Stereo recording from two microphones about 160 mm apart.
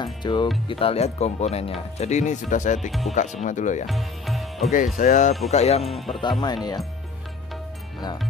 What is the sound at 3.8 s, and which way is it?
Music, centre (ahead or behind).